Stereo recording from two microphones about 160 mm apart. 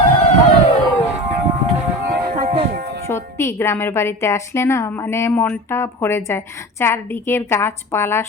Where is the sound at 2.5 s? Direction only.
40° right (ahead or behind).